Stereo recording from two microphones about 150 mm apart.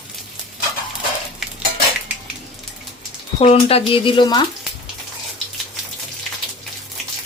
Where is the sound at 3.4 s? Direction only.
40° left (ahead or behind).